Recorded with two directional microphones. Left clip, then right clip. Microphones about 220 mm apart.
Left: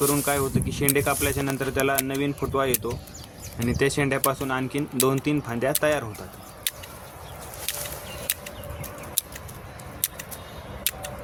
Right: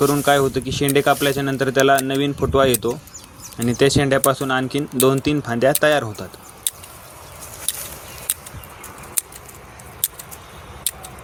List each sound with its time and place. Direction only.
0.0 s speech: 90° left